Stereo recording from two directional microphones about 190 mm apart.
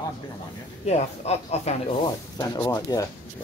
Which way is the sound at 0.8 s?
35° left (ahead or behind).